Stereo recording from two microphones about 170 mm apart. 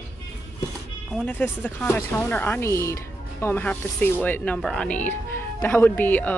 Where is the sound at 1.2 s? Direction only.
10° left (ahead or behind).